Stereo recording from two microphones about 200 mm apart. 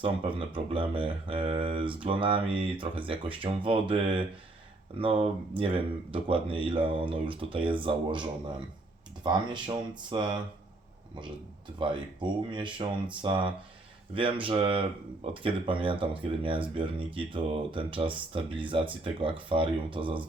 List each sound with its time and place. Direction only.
0.0 s speech: 25° right (ahead or behind)
11.8 s speech: 25° right (ahead or behind)